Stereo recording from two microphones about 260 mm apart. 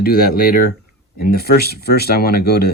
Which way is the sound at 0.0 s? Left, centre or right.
Left.